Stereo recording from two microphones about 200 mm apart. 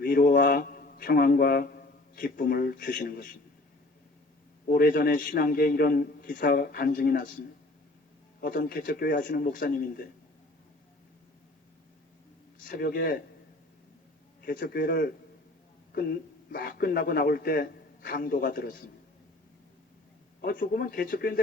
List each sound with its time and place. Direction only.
0.0 s a sound: 45° left (ahead or behind)
4.7 s a man's voice: 45° left (ahead or behind)
12.6 s a man's voice: 45° left (ahead or behind)
14.4 s a man's voice: 45° left (ahead or behind)
20.4 s a man's voice: 45° left (ahead or behind)